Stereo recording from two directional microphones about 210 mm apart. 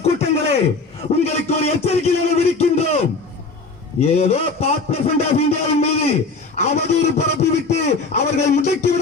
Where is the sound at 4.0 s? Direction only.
30° left (ahead or behind).